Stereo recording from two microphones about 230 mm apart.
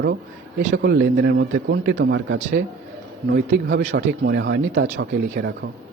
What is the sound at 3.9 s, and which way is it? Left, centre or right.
Speech, right.